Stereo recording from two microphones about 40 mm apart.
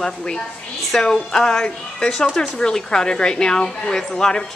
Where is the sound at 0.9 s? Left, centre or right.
Centre.